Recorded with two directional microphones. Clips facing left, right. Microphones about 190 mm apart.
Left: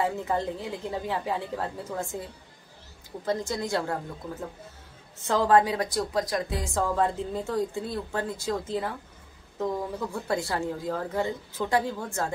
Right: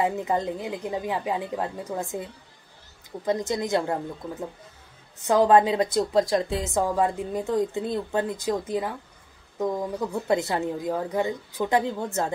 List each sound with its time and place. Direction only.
0.0 s a woman's voice: 15° right (ahead or behind)
3.3 s a woman's voice: 20° right (ahead or behind)